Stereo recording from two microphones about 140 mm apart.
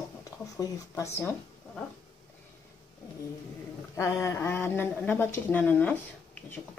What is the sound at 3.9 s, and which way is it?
A woman's voice, 20° left (ahead or behind).